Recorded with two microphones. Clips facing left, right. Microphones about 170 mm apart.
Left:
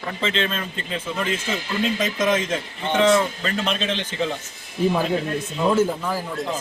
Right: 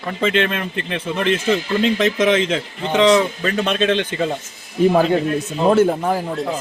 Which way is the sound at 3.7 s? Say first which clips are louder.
Right 7 dB; 60° right (ahead or behind).